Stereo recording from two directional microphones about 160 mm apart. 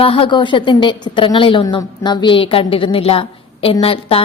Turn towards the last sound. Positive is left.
turn(degrees=35)  # may be behind; listen again after turning